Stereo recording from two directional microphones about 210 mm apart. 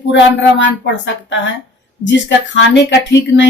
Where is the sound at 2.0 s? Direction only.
60° left (ahead or behind).